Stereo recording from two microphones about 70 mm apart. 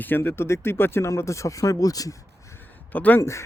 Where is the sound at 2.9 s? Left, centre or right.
Left.